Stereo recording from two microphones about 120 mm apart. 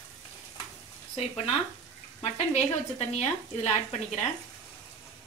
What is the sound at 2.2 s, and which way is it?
Speech, 70° left (ahead or behind).